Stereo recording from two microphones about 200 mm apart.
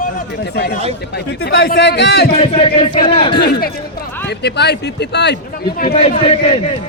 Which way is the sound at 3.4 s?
50° left (ahead or behind).